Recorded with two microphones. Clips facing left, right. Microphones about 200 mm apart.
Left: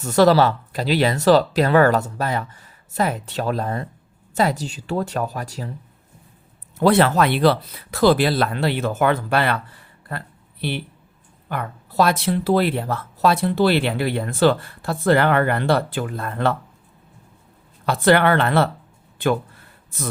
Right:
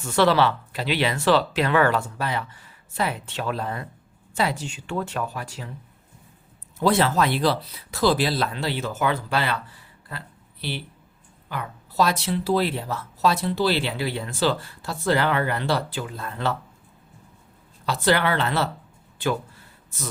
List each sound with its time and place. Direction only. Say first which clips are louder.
0.0 s speech: left 5 dB; 40° left (ahead or behind)
6.7 s speech: left 5 dB; 60° left (ahead or behind)
17.8 s speech: left 6 dB; 55° left (ahead or behind)